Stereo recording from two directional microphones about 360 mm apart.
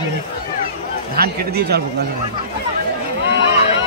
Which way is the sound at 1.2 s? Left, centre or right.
Right.